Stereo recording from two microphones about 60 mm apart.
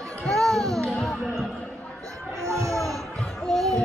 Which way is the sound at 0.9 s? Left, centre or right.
Centre.